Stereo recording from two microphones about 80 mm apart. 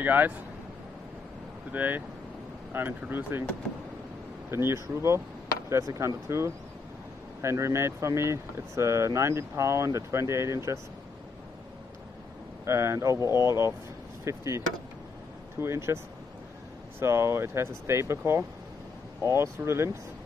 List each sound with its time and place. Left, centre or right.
0.0 s speech: right
1.7 s speech: right
4.5 s speech: right
12.6 s speech: right
15.6 s speech: right
17.0 s speech: right